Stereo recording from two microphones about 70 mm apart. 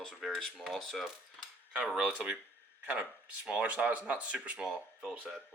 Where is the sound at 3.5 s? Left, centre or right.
Centre.